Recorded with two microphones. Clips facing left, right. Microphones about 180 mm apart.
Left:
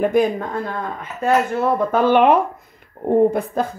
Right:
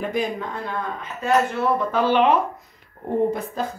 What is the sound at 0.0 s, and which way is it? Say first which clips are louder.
Speech: left 8 dB; 50° left (ahead or behind).